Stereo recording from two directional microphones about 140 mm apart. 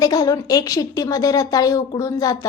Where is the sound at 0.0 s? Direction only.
25° left (ahead or behind).